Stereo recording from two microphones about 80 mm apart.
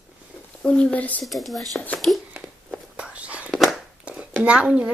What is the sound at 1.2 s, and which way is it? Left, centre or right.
Speech, centre.